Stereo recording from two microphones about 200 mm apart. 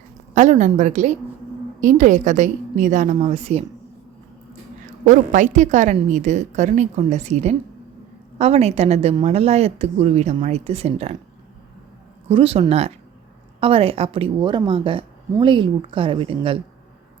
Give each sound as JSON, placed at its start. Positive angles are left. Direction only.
{"t": 0.3, "sound": "a woman's voice", "side_deg": -35}
{"t": 5.0, "sound": "a woman's voice", "side_deg": -40}
{"t": 12.3, "sound": "a woman's voice", "side_deg": -30}